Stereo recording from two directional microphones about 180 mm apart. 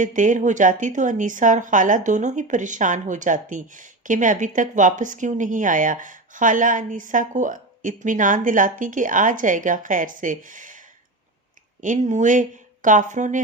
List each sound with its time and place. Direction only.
0.0 s speech: 45° right (ahead or behind)
11.8 s speech: 45° right (ahead or behind)